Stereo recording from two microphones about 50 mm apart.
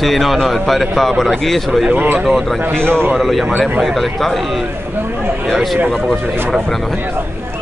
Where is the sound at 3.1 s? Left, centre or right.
Centre.